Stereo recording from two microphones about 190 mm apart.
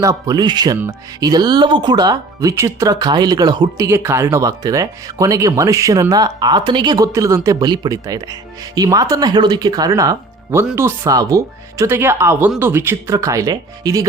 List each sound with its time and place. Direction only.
0.0 s speech: 20° right (ahead or behind)